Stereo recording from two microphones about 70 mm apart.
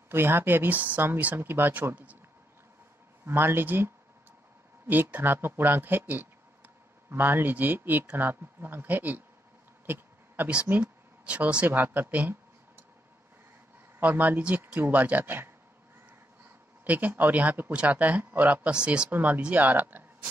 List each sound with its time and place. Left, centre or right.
0.1 s speech: right
3.3 s speech: right
5.1 s speech: right
9.8 s a sound: right
10.7 s speech: right
13.9 s speech: right
16.8 s speech: right
19.0 s speech: right